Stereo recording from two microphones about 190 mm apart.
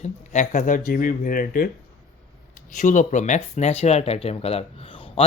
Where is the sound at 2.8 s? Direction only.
40° left (ahead or behind).